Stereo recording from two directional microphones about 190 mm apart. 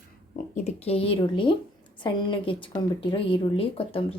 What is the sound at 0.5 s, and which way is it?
A woman's voice, 35° left (ahead or behind).